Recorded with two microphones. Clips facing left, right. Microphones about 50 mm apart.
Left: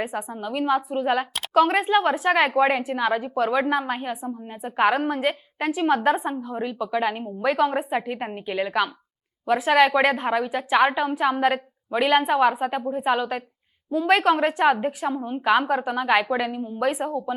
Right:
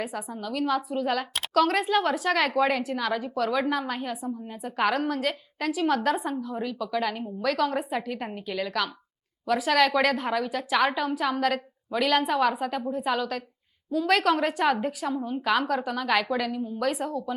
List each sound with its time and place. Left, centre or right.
0.0 s a woman's voice: centre